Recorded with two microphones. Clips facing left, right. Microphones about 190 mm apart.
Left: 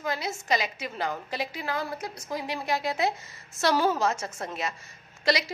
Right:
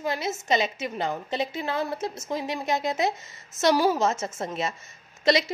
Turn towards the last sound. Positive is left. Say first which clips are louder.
# right 4 dB
turn(degrees=-25)  # may be behind; listen again after turning